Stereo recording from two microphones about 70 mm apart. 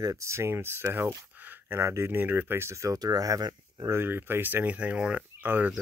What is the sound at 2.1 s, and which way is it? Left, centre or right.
Speech, right.